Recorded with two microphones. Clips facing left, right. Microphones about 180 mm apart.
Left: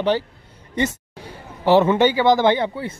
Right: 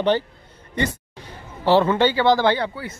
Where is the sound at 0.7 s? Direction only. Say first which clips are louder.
Left 2 dB; 20° left (ahead or behind).